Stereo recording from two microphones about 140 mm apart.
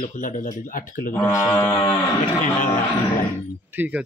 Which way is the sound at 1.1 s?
15° left (ahead or behind).